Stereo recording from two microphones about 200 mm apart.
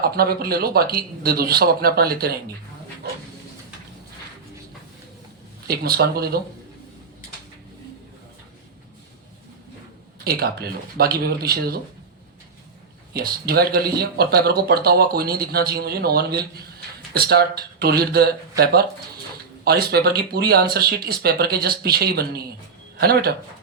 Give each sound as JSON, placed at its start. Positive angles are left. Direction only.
{"t": 0.0, "sound": "speech", "side_deg": -50}
{"t": 5.6, "sound": "speech", "side_deg": -50}
{"t": 10.2, "sound": "speech", "side_deg": -50}
{"t": 13.1, "sound": "speech", "side_deg": -50}